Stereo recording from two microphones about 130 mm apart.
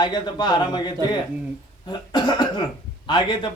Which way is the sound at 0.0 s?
35° left (ahead or behind).